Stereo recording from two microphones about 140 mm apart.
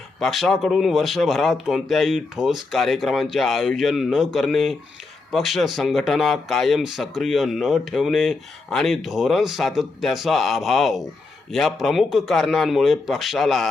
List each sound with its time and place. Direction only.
0.2 s speech: centre (ahead or behind)